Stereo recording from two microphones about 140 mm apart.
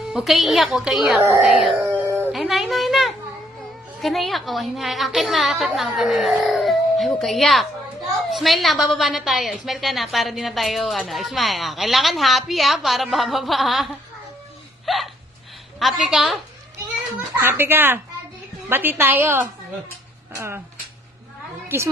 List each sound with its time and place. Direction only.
0.1 s a woman's voice: centre (ahead or behind)
2.0 s dog: 15° right (ahead or behind)
2.3 s a sound: centre (ahead or behind)
4.0 s a woman's voice: centre (ahead or behind)
14.9 s a woman's voice: centre (ahead or behind)
17.5 s a woman's voice: 15° right (ahead or behind)